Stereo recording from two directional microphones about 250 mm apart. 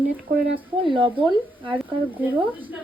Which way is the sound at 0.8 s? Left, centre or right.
Right.